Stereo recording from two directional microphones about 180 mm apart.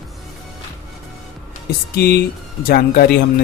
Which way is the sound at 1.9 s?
60° left (ahead or behind).